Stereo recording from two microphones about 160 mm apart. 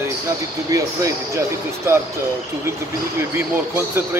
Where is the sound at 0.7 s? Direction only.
20° right (ahead or behind).